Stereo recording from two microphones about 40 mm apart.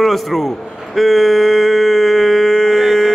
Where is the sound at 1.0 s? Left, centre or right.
Centre.